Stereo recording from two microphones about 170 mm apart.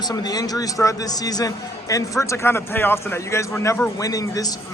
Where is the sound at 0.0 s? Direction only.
25° left (ahead or behind).